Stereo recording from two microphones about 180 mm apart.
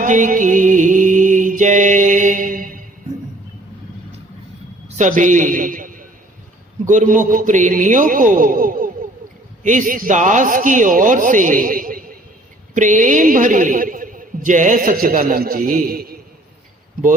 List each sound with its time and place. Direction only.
0.0 s music: 45° right (ahead or behind)
4.9 s a man's voice: 45° right (ahead or behind)